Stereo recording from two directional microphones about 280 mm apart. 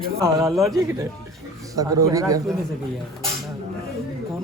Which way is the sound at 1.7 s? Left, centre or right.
Centre.